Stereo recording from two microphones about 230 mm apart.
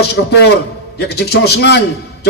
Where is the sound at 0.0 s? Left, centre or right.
Left.